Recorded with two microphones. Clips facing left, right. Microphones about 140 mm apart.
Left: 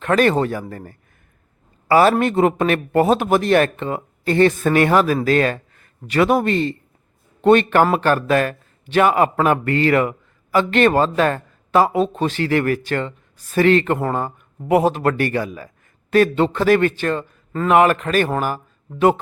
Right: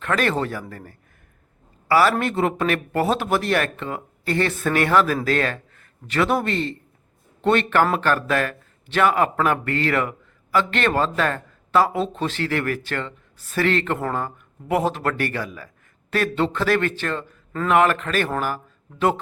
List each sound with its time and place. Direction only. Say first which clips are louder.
0.0 s a man's voice: left 6 dB; 20° left (ahead or behind)